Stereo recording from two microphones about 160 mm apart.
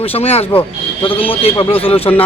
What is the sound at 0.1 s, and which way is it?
Speech, 40° left (ahead or behind).